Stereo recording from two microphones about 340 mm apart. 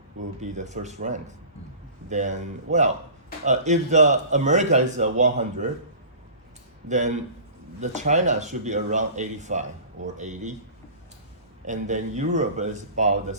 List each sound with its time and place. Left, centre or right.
0.3 s speech: right
6.8 s speech: right
11.6 s speech: right